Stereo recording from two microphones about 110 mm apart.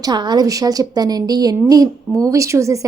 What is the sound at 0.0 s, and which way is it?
A woman's voice, 40° right (ahead or behind).